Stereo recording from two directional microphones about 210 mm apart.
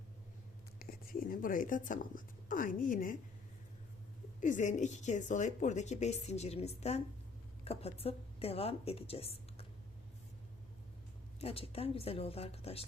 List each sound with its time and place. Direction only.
0.8 s speech: 45° left (ahead or behind)
4.4 s a woman's voice: 35° left (ahead or behind)
11.3 s speech: 30° left (ahead or behind)